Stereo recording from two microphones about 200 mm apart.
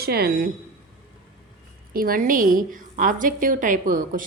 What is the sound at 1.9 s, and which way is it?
A woman's voice, 45° right (ahead or behind).